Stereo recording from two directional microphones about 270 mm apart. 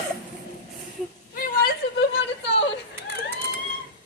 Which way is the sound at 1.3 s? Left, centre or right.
Left.